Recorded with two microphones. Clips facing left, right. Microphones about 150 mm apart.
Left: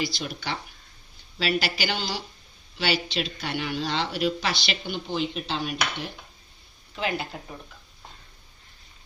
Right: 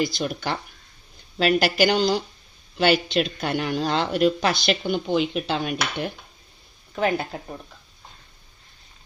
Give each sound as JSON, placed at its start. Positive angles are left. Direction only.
{"t": 0.2, "sound": "speech", "side_deg": -50}